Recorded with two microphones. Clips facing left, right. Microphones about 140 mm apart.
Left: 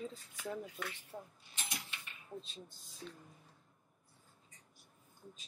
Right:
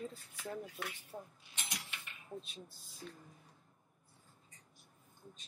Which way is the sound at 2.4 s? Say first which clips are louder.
Even; 10° right (ahead or behind).